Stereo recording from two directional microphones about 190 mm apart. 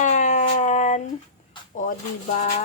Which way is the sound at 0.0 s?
40° left (ahead or behind).